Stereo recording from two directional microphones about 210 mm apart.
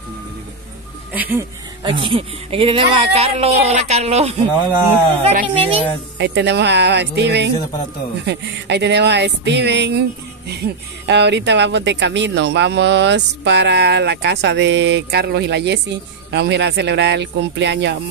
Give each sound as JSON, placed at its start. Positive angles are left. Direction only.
{"t": 1.1, "sound": "speech", "side_deg": -10}
{"t": 1.8, "sound": "speech", "side_deg": -20}
{"t": 5.6, "sound": "speech", "side_deg": -25}
{"t": 6.1, "sound": "speech", "side_deg": -55}